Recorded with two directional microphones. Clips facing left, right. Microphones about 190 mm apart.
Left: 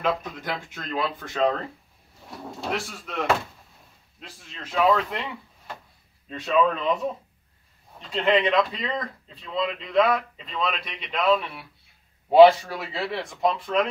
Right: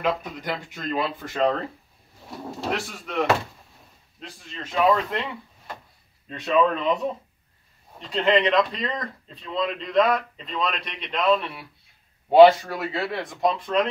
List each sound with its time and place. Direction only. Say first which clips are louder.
0.0 s speech: right 1 dB; 15° right (ahead or behind); by 7.0 s centre (ahead or behind)
8.0 s speech: right 1 dB; centre (ahead or behind)